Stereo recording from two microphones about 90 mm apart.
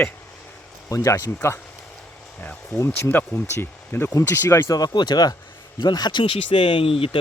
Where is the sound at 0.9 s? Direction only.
40° left (ahead or behind).